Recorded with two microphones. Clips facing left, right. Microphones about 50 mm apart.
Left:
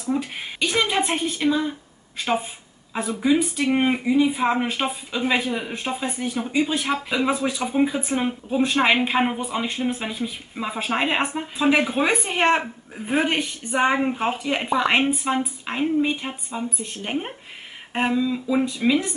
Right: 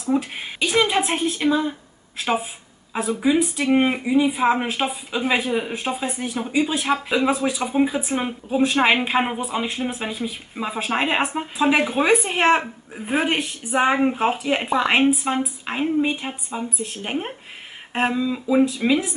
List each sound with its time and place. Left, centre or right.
0.0 s speech: centre